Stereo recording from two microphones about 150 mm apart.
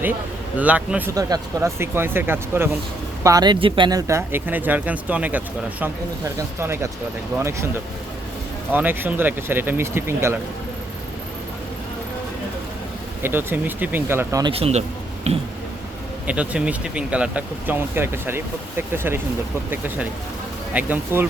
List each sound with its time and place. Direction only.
0.5 s speech: 10° right (ahead or behind)
1.1 s speech: 25° right (ahead or behind)
3.2 s speech: 25° right (ahead or behind); by 5.4 s 10° right (ahead or behind)
6.6 s speech: 15° right (ahead or behind)
13.2 s speech: 15° right (ahead or behind)
14.5 s speech: 45° right (ahead or behind)
16.2 s speech: 10° right (ahead or behind)